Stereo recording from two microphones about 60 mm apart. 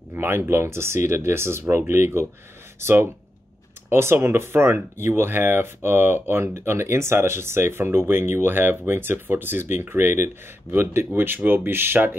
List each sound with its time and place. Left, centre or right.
0.1 s speech: right